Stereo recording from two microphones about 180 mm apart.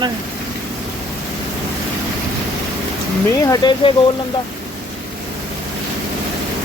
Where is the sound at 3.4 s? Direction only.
25° left (ahead or behind).